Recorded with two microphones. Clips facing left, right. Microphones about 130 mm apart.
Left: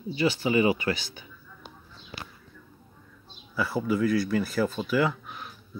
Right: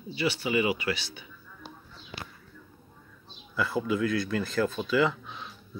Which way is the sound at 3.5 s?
10° left (ahead or behind).